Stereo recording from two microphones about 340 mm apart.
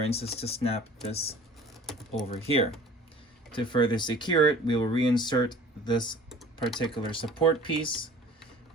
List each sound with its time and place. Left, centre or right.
0.0 s speech: centre